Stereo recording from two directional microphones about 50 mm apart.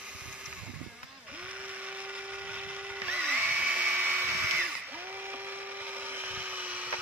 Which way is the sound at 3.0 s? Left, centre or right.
Right.